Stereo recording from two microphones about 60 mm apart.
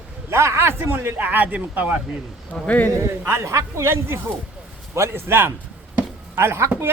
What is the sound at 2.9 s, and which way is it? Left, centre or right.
Speech, right.